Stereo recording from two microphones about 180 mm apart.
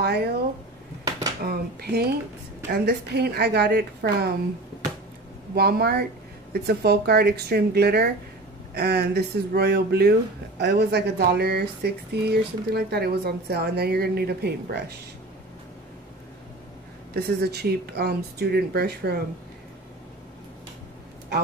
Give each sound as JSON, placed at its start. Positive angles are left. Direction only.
{"t": 0.0, "sound": "speech", "side_deg": -65}
{"t": 1.4, "sound": "speech", "side_deg": -60}
{"t": 5.5, "sound": "speech", "side_deg": -60}
{"t": 17.1, "sound": "speech", "side_deg": -60}